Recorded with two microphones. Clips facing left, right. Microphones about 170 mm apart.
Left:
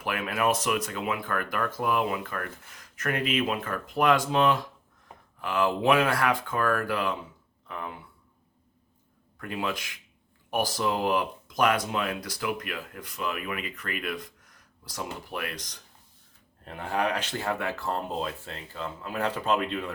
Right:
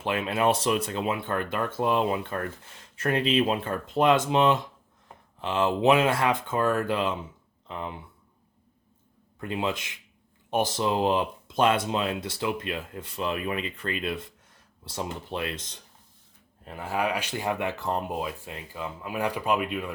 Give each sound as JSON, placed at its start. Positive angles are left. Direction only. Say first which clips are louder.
{"t": 0.0, "sound": "speech", "louder": "right 3 dB", "side_deg": -25}
{"t": 9.4, "sound": "speech", "louder": "right 3 dB", "side_deg": -20}
{"t": 16.6, "sound": "speech", "louder": "even", "side_deg": -5}